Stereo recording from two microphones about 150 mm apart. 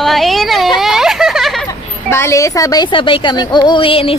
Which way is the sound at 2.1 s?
20° left (ahead or behind).